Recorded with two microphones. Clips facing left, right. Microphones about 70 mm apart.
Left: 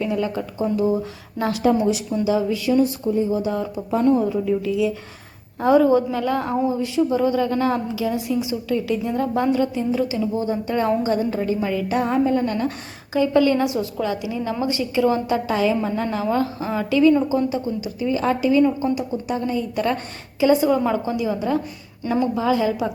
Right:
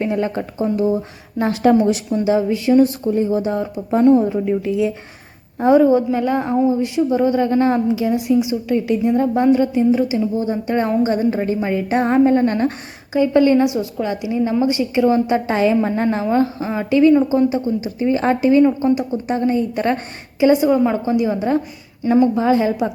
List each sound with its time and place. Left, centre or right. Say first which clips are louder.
0.0 s speech: right 3 dB; right
1.4 s a woman's voice: right 4 dB; right
1.6 s speech: right 5 dB; right
2.1 s a woman's voice: right 5 dB; right
2.8 s speech: right 3 dB; right
3.4 s a woman's voice: right 3 dB; right
5.5 s a woman's voice: right 3 dB; right
13.1 s a woman's voice: right 4 dB; right
15.5 s speech: right 5 dB; right
16.2 s a woman's voice: right 4 dB; right
20.4 s a woman's voice: right 3 dB; right
21.1 s a woman's voice: right 5 dB; right